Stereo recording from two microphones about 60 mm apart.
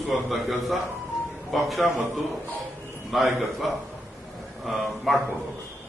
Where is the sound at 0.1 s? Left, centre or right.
Centre.